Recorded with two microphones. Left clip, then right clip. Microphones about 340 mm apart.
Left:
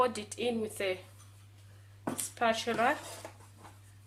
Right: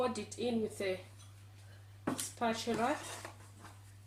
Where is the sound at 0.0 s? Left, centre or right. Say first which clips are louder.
Left 5 dB; left.